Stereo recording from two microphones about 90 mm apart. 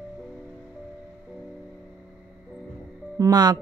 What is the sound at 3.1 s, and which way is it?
Speech, 45° right (ahead or behind).